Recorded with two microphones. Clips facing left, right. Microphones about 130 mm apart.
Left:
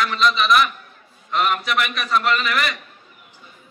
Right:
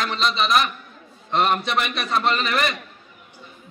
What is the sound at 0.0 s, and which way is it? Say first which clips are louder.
A man's voice: left 3 dB; 30° right (ahead or behind).